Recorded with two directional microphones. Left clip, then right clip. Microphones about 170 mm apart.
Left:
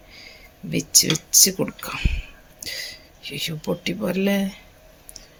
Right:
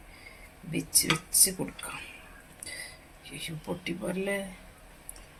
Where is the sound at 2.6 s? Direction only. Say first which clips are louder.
Left 11 dB; 65° left (ahead or behind).